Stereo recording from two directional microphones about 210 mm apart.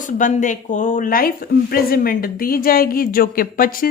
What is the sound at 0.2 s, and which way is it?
Speech, 35° left (ahead or behind).